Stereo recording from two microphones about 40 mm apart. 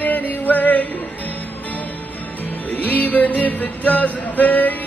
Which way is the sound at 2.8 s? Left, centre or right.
Left.